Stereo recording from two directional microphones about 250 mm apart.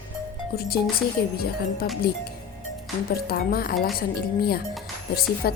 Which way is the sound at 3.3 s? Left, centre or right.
Left.